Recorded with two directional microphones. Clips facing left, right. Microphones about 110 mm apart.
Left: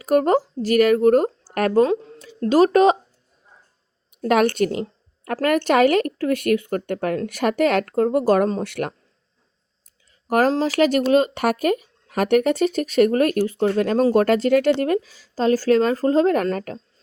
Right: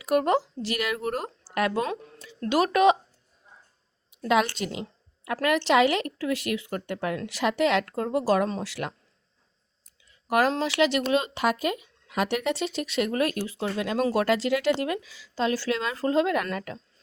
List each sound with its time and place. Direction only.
0.0 s speech: 45° left (ahead or behind)
1.9 s speech: 30° left (ahead or behind)
4.2 s speech: 55° left (ahead or behind)
10.1 s a sound: 40° left (ahead or behind)
10.5 s speech: 40° left (ahead or behind)